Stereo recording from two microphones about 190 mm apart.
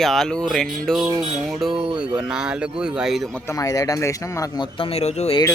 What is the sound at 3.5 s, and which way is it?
Speech, 15° left (ahead or behind).